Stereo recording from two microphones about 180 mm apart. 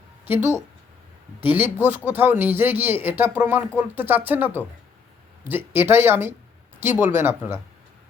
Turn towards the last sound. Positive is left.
turn(degrees=-10)  # may be behind; listen again after turning